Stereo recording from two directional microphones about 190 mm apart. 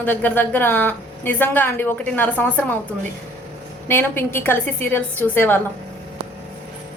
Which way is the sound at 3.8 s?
10° left (ahead or behind).